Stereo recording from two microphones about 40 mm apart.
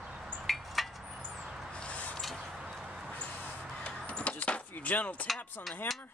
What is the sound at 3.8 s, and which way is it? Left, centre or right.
Vehicle, left.